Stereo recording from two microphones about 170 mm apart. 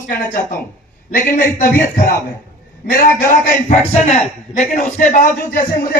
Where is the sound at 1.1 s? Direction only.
55° left (ahead or behind).